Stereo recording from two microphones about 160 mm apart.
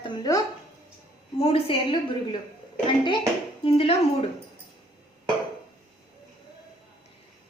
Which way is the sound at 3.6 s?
40° left (ahead or behind).